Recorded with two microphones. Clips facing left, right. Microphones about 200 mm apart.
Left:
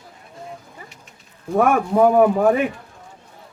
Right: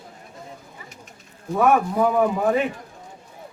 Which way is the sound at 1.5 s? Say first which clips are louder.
Left 2 dB; 50° left (ahead or behind).